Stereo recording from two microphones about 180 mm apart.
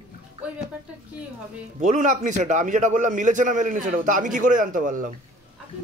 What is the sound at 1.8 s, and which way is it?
Speech, 45° right (ahead or behind).